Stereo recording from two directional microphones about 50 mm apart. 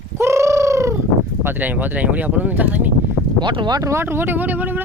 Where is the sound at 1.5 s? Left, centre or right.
Right.